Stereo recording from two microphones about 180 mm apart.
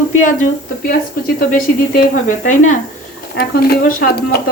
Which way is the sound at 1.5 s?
50° left (ahead or behind).